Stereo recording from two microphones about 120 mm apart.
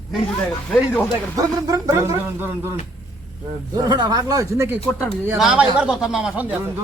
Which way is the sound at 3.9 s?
35° right (ahead or behind).